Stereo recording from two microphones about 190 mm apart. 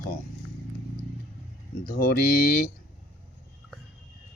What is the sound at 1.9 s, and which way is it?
Speech, 50° left (ahead or behind).